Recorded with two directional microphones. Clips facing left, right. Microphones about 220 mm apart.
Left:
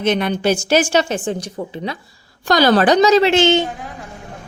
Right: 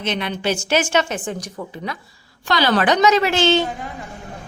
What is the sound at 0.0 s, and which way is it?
A woman's voice, 45° left (ahead or behind).